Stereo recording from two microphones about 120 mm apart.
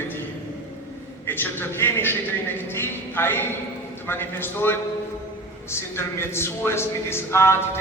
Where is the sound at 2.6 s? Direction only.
20° left (ahead or behind).